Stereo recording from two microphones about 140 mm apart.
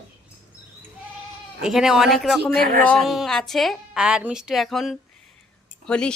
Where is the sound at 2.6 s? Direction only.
90° right.